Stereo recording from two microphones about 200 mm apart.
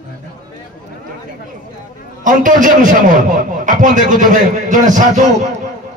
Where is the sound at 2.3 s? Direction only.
40° right (ahead or behind).